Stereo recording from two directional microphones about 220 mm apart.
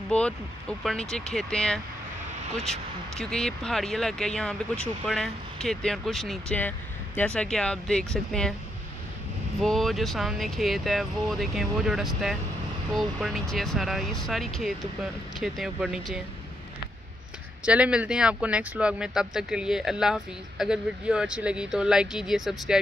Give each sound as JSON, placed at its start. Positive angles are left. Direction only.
{"t": 0.1, "sound": "speech", "side_deg": 5}
{"t": 2.5, "sound": "speech", "side_deg": -30}
{"t": 3.2, "sound": "speech", "side_deg": 5}
{"t": 9.6, "sound": "speech", "side_deg": 0}
{"t": 17.6, "sound": "speech", "side_deg": -5}